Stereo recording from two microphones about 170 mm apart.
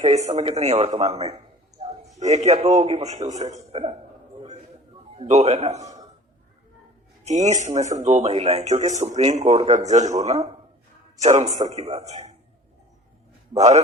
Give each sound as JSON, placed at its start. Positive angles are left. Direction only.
{"t": 0.0, "sound": "a man's voice", "side_deg": -45}
{"t": 5.1, "sound": "speech", "side_deg": -40}
{"t": 7.3, "sound": "speech", "side_deg": -45}
{"t": 13.6, "sound": "speech", "side_deg": -40}